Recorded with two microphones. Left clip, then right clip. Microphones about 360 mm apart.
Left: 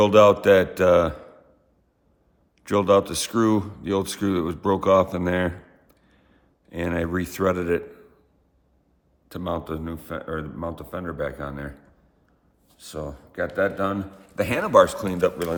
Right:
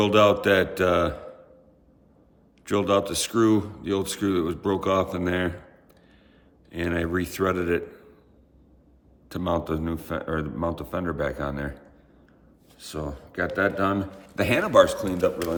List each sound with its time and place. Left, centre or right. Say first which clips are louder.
0.0 s speech: left 4 dB; centre
2.6 s speech: left 4 dB; centre
6.7 s speech: left 1 dB; centre
9.3 s a man's voice: right 2 dB; centre
12.8 s a man's voice: even; centre; by 15.5 s left